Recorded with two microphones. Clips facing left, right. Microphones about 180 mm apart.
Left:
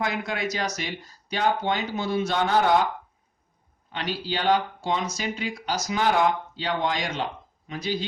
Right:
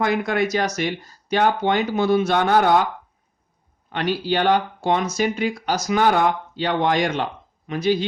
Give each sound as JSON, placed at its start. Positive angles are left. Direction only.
{"t": 0.0, "sound": "speech", "side_deg": -55}
{"t": 3.9, "sound": "speech", "side_deg": -60}